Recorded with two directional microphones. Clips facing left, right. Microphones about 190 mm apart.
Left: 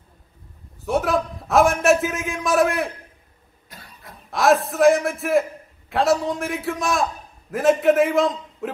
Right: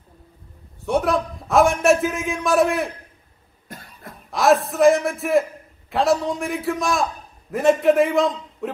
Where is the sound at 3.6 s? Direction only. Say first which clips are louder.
Right 6 dB; 50° right (ahead or behind).